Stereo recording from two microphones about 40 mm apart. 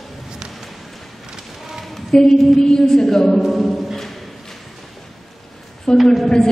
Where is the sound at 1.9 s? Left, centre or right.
Centre.